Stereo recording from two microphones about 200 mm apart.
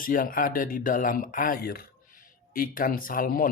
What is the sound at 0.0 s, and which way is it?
Speech, 45° left (ahead or behind).